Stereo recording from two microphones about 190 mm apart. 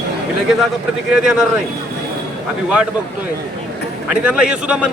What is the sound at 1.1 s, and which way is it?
Speech, 5° right (ahead or behind).